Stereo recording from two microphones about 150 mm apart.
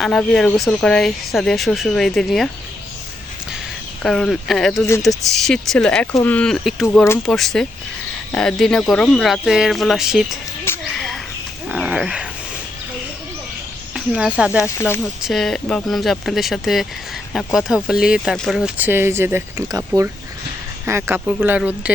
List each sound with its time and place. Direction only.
0.0 s speech: 5° left (ahead or behind)
4.0 s speech: centre (ahead or behind)
10.9 s a sound: centre (ahead or behind)
11.7 s wild animals: 5° right (ahead or behind)
13.9 s speech: 5° right (ahead or behind)
14.6 s speech: 15° left (ahead or behind)
15.2 s speech: centre (ahead or behind)
18.8 s speech: 15° right (ahead or behind)
20.8 s speech: 15° right (ahead or behind)